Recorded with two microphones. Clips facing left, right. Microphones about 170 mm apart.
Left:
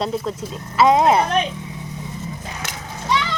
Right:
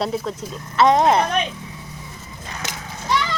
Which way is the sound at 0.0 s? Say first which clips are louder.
Left 1 dB; 5° right (ahead or behind).